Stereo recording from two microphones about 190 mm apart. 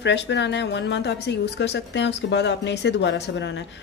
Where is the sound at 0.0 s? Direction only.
70° left (ahead or behind).